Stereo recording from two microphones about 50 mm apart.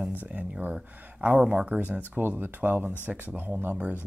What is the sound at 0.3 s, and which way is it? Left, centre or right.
Speech, right.